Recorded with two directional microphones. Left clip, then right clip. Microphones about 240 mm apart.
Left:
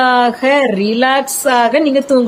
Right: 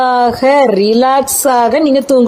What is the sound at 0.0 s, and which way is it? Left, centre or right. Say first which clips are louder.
Speech: right 1 dB; right.